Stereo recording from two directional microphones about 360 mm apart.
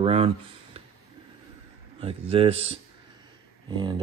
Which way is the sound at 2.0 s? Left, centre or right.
Centre.